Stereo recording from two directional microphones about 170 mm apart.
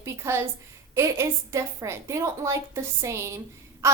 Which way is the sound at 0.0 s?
15° right (ahead or behind).